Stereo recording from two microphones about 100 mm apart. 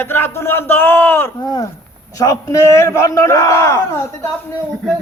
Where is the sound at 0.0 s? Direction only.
25° left (ahead or behind).